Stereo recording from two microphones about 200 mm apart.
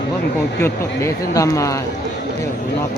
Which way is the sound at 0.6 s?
15° left (ahead or behind).